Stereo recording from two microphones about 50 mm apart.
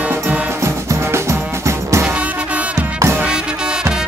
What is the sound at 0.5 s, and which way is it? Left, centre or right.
Music, right.